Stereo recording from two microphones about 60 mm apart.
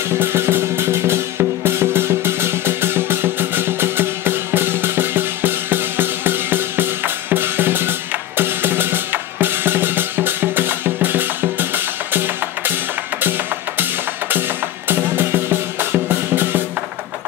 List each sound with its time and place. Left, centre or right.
0.2 s music: right
8.4 s drum: right
13.2 s music: right
14.9 s music: right